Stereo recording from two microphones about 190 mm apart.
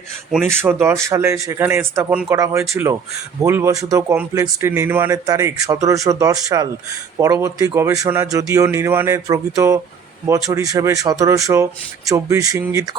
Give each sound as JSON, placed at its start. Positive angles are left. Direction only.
{"t": 0.6, "sound": "speech", "side_deg": -15}